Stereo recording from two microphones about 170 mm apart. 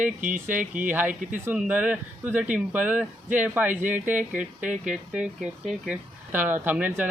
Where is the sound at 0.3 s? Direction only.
50° right (ahead or behind).